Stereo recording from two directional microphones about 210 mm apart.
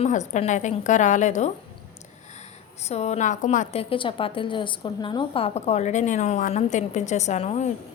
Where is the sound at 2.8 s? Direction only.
30° left (ahead or behind).